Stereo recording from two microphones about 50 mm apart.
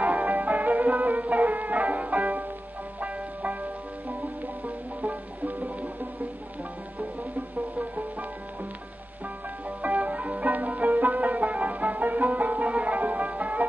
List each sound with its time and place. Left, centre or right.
0.0 s music: right
4.6 s music: right
7.7 s music: right
9.7 s music: right